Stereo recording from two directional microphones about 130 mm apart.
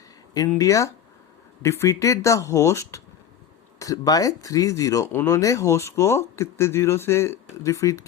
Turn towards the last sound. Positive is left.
turn(degrees=25)  # may be behind; listen again after turning